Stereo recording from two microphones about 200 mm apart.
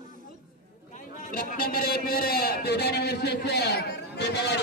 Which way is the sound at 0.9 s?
45° left (ahead or behind).